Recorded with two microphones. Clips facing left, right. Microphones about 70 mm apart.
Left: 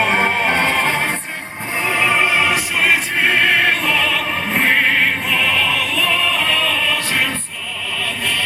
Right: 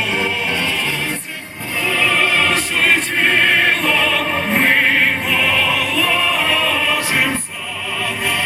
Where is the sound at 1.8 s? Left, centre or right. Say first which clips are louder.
Left 1 dB; left.